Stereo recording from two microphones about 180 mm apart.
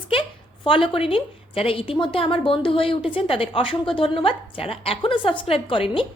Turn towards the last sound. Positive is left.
turn(degrees=30)  # may be behind; listen again after turning